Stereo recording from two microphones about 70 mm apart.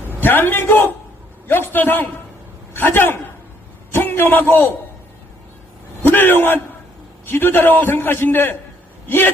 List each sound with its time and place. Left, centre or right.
0.2 s a man's voice: left
6.1 s a man's voice: left